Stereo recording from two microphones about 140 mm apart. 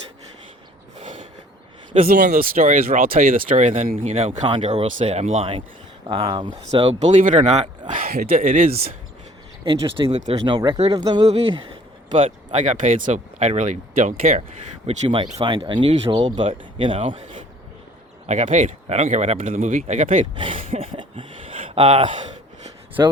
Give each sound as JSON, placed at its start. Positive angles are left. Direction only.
{"t": 0.9, "sound": "a sound", "side_deg": -60}
{"t": 2.0, "sound": "speech", "side_deg": -85}
{"t": 4.0, "sound": "speech", "side_deg": -45}
{"t": 7.0, "sound": "speech", "side_deg": -65}
{"t": 9.6, "sound": "speech", "side_deg": -35}
{"t": 10.1, "sound": "speech", "side_deg": -50}
{"t": 10.9, "sound": "speech", "side_deg": -30}
{"t": 12.1, "sound": "speech", "side_deg": -40}
{"t": 12.5, "sound": "speech", "side_deg": -60}
{"t": 14.8, "sound": "speech", "side_deg": -40}
{"t": 18.3, "sound": "speech", "side_deg": -60}
{"t": 20.3, "sound": "a sound", "side_deg": -40}
{"t": 21.8, "sound": "speech", "side_deg": -40}
{"t": 23.0, "sound": "speech", "side_deg": -25}